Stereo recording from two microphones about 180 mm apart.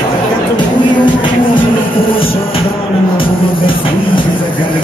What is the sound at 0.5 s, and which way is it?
Speech, 25° left (ahead or behind).